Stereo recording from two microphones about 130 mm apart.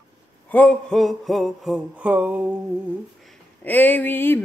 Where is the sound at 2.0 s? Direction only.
10° right (ahead or behind).